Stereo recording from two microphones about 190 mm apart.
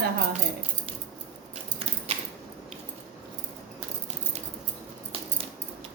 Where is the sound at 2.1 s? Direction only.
35° right (ahead or behind).